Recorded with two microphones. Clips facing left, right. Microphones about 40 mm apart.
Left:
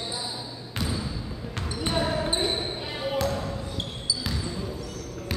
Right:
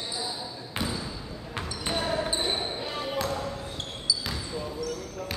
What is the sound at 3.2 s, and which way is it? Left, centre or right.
Basketball bounce, centre.